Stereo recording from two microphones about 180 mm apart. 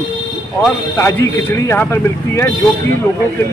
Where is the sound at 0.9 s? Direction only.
15° left (ahead or behind).